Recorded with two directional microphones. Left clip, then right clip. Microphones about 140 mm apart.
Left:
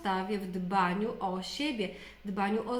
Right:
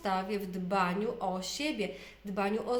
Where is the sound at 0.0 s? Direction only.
35° right (ahead or behind).